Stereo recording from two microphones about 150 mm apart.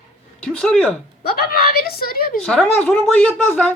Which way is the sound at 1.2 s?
90° left.